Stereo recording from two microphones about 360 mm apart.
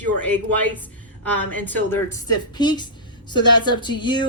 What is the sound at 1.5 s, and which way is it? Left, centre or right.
A woman's voice, centre.